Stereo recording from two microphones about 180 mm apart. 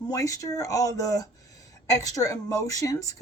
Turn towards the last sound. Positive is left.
turn(degrees=20)  # may be behind; listen again after turning